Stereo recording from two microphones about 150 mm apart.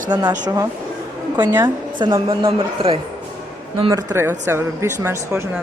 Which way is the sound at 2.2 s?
35° right (ahead or behind).